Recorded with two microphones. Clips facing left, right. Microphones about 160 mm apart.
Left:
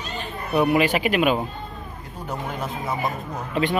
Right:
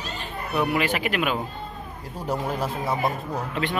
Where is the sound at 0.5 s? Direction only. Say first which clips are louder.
Left 5 dB; 20° left (ahead or behind).